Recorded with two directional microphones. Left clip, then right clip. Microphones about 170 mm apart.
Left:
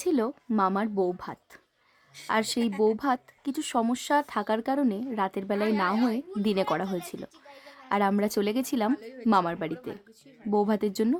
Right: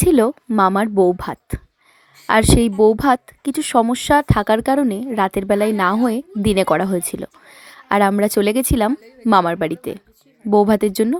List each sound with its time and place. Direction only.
0.0 s a woman's voice: 30° right (ahead or behind)